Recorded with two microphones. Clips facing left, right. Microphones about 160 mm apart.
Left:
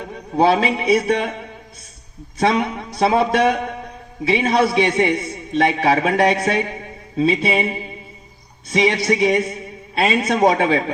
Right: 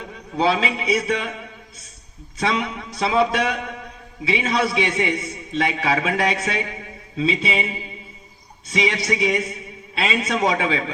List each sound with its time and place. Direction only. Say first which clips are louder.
0.3 s a man's voice: left 5 dB; 50° left (ahead or behind)